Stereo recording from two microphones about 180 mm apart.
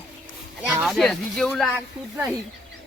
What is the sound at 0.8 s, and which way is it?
A child's voice, centre (ahead or behind).